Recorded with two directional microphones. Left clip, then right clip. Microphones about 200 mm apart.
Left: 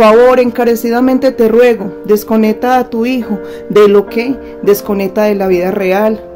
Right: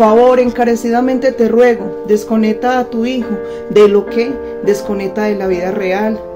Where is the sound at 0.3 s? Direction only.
45° left (ahead or behind).